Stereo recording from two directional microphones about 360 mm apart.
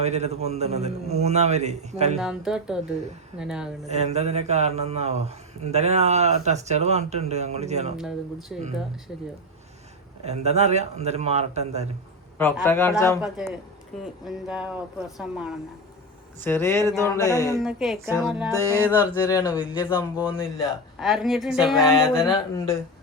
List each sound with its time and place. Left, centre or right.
0.0 s speech: centre
2.1 s speech: centre
3.8 s speech: centre
7.9 s speech: centre
10.2 s speech: centre
12.4 s speech: centre
17.5 s speech: centre
19.2 s speech: centre
21.0 s speech: centre